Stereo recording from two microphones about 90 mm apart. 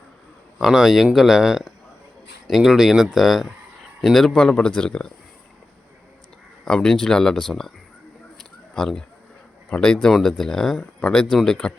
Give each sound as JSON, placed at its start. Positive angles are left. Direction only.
{"t": 0.6, "sound": "speech", "side_deg": 0}
{"t": 6.7, "sound": "speech", "side_deg": 5}
{"t": 8.4, "sound": "a sound", "side_deg": 5}
{"t": 9.6, "sound": "speech", "side_deg": 10}